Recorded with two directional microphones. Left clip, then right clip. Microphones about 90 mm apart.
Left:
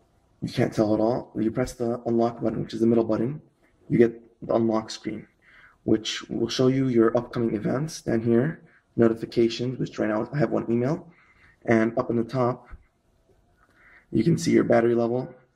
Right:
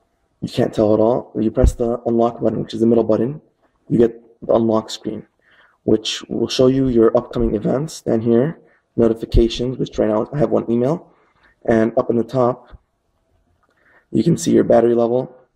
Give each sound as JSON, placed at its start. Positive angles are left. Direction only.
{"t": 0.4, "sound": "speech", "side_deg": -40}
{"t": 5.1, "sound": "a sound", "side_deg": -40}
{"t": 6.4, "sound": "speech", "side_deg": -35}
{"t": 14.1, "sound": "speech", "side_deg": -35}